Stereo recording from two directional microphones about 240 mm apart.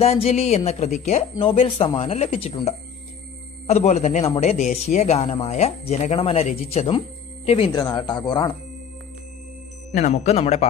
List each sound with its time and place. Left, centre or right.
0.0 s speech: left
9.9 s speech: left